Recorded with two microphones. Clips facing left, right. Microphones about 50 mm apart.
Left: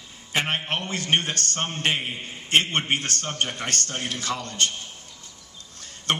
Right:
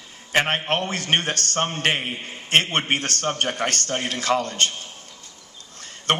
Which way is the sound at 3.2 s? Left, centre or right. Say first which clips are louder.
Right 5 dB; right.